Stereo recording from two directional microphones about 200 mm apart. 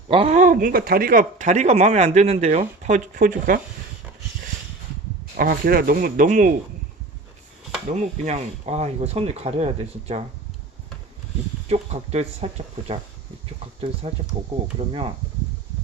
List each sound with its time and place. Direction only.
0.1 s speech: 30° right (ahead or behind)
5.4 s speech: 50° right (ahead or behind)
7.9 s speech: 35° right (ahead or behind)
11.7 s speech: 30° right (ahead or behind)
14.0 s speech: 30° right (ahead or behind)